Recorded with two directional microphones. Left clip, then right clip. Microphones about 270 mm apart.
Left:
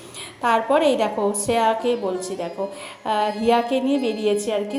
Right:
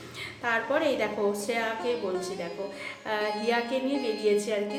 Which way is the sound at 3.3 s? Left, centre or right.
Centre.